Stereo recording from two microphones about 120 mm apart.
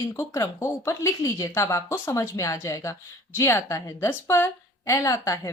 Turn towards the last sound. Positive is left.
turn(degrees=25)  # may be behind; listen again after turning